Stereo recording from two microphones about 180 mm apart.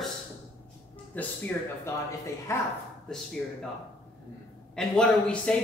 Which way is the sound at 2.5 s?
15° left (ahead or behind).